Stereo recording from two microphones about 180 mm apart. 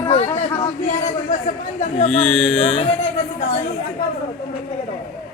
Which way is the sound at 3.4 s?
40° left (ahead or behind).